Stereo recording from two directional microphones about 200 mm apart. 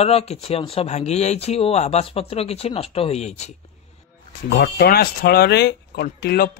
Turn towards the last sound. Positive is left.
turn(degrees=50)  # may be behind; listen again after turning